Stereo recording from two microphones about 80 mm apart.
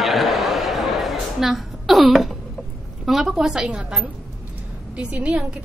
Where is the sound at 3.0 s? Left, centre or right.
Centre.